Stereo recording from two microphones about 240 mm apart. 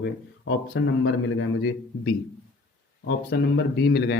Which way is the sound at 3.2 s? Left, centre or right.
Left.